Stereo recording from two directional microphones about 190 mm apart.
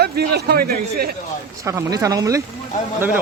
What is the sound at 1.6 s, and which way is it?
Speech, 15° right (ahead or behind).